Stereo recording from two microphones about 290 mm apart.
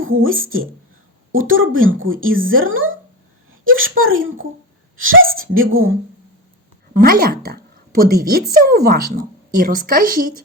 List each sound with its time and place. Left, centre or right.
0.3 s a woman's voice: right
1.3 s speech: right
6.9 s a woman's voice: right